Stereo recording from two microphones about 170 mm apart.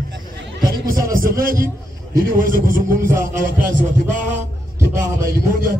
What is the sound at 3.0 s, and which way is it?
Speech, 15° right (ahead or behind).